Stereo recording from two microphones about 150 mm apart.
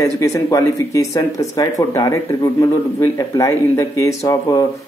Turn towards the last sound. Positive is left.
turn(degrees=25)  # may be behind; listen again after turning